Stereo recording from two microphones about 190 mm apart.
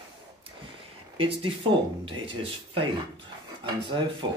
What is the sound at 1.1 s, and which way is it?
Speech, 30° right (ahead or behind).